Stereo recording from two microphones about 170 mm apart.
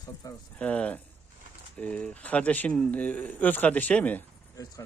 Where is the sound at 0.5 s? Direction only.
5° left (ahead or behind).